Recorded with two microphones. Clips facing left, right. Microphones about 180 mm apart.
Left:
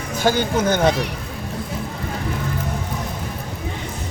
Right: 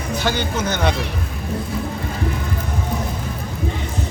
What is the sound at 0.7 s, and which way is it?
Speech, 40° left (ahead or behind).